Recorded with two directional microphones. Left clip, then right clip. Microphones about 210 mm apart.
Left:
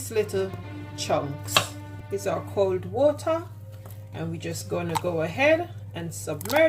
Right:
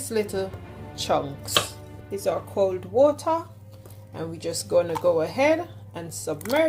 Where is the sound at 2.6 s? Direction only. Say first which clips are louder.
Right 3 dB; 25° right (ahead or behind).